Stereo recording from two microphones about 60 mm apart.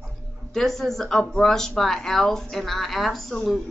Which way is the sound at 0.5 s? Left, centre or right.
Centre.